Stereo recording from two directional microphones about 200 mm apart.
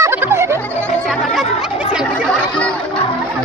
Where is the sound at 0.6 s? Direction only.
5° left (ahead or behind).